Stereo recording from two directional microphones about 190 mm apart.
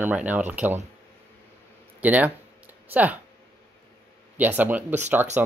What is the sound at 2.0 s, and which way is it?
Speech, 10° right (ahead or behind).